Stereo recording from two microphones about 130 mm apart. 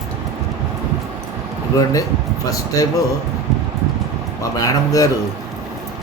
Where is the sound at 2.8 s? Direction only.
30° left (ahead or behind).